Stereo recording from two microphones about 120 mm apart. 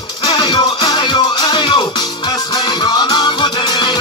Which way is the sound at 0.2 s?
40° left (ahead or behind).